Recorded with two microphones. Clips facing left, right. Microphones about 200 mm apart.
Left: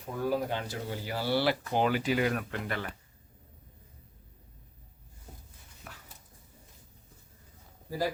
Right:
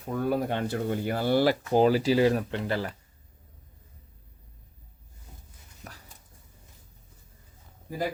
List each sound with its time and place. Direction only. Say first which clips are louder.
0.3 s speech: right 3 dB; 60° right (ahead or behind); by 2.9 s 30° right (ahead or behind)
5.8 s dog: right 3 dB; 40° right (ahead or behind)
7.9 s speech: right 1 dB; 20° right (ahead or behind)